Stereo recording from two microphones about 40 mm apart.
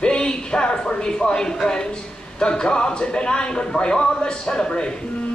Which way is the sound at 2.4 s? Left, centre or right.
Left.